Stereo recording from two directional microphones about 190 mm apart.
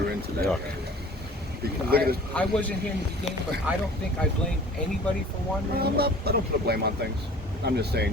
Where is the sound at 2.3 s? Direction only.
5° left (ahead or behind).